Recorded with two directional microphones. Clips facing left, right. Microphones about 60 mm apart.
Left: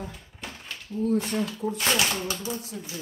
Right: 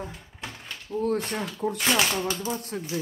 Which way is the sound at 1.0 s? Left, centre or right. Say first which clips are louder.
Left 1 dB; right.